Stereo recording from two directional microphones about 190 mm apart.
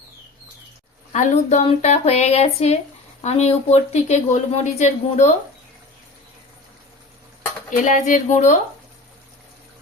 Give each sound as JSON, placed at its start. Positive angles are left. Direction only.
{"t": 1.1, "sound": "a woman's voice", "side_deg": 40}
{"t": 7.8, "sound": "a woman's voice", "side_deg": 40}